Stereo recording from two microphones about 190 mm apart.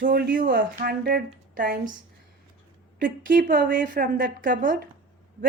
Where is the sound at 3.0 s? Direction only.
45° right (ahead or behind).